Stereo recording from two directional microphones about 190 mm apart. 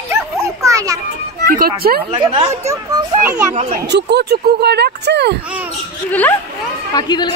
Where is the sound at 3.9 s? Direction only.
65° right (ahead or behind).